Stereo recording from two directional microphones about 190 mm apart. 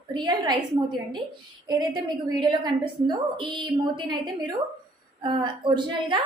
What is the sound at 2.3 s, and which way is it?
A woman's voice, 20° right (ahead or behind).